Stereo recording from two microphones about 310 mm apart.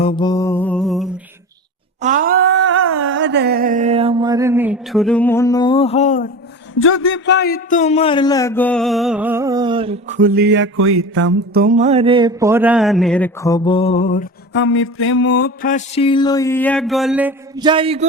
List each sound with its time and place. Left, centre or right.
0.0 s music: centre
2.0 s a sound: right; by 6.3 s left
6.7 s a man's voice: left; by 18.0 s centre